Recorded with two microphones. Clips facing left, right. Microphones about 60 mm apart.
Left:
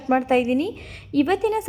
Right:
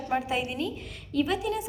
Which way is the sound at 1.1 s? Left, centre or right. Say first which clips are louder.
Left 7 dB; left.